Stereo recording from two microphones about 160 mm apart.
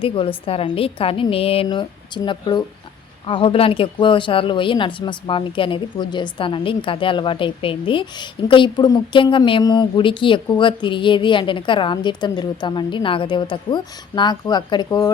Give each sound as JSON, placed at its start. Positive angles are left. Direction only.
{"t": 0.0, "sound": "speech", "side_deg": 35}